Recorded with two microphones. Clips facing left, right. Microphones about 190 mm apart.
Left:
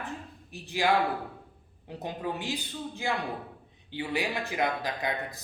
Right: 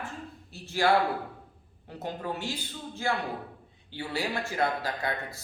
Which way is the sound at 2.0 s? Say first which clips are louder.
Even; 15° left (ahead or behind).